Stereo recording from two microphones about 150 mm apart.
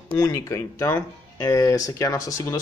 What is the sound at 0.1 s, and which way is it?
Speech, 25° left (ahead or behind).